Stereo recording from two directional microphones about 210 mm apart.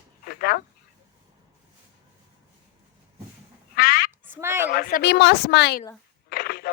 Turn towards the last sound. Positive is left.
turn(degrees=45)  # may be behind; listen again after turning